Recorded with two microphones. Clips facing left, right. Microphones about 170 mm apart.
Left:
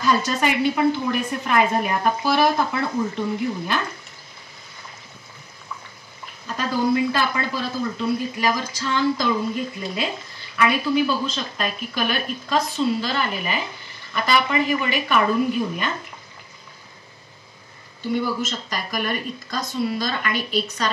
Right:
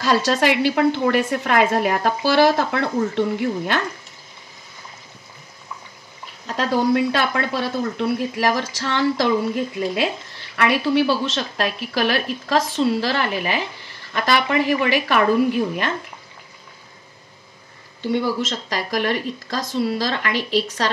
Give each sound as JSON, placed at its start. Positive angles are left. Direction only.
{"t": 0.0, "sound": "a woman's voice", "side_deg": -90}
{"t": 6.4, "sound": "a woman's voice", "side_deg": -75}
{"t": 10.5, "sound": "a woman's voice", "side_deg": -75}
{"t": 18.1, "sound": "speech", "side_deg": -90}